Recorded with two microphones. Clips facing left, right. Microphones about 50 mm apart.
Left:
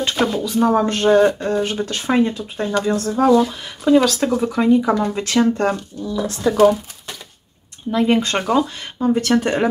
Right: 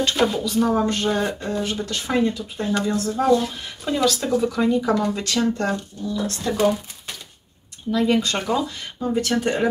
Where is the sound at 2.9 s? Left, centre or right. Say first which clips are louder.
Left 4 dB; left.